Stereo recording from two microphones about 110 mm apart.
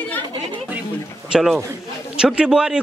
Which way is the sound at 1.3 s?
Centre (ahead or behind).